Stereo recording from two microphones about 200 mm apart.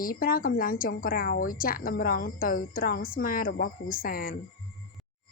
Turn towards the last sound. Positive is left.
turn(degrees=45)  # may be behind; listen again after turning